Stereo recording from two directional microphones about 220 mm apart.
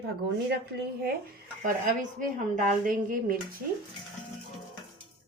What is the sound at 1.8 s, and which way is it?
Speech, 35° right (ahead or behind).